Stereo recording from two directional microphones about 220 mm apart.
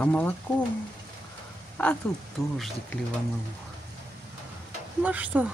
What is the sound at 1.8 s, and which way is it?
Speech, 5° left (ahead or behind).